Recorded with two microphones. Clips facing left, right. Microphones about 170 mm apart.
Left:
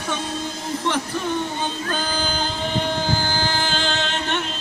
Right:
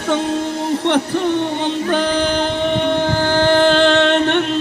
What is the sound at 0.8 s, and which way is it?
Music, 65° right (ahead or behind).